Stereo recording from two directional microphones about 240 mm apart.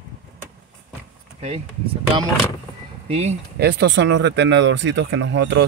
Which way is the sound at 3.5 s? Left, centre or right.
Right.